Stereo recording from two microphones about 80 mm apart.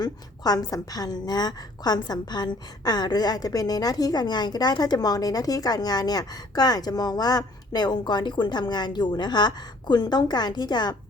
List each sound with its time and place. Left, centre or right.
0.0 s a woman's voice: left